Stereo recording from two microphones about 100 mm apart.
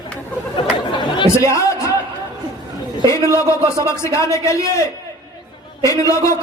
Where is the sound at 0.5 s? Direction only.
50° left (ahead or behind).